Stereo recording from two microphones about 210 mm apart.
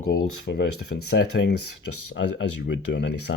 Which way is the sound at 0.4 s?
55° left (ahead or behind).